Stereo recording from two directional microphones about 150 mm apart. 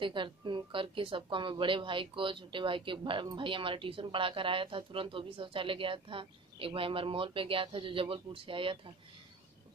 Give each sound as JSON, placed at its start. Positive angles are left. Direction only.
{"t": 0.0, "sound": "a woman's voice", "side_deg": -35}